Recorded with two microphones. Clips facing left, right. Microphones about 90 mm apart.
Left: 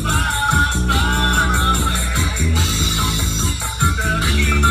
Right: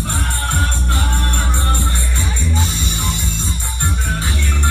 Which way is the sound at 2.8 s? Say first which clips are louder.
Left 2 dB; 80° left.